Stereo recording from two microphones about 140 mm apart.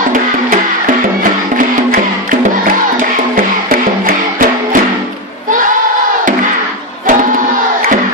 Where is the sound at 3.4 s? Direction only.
90° right.